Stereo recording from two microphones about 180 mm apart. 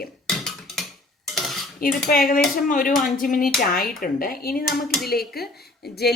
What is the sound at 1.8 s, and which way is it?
A woman's voice, 55° left (ahead or behind).